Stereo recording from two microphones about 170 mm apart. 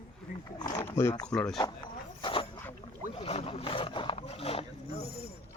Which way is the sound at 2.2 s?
30° left (ahead or behind).